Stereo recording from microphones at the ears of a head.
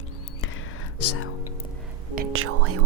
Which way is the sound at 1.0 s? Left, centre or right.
Left.